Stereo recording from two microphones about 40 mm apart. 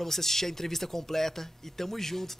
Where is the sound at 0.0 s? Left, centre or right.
Centre.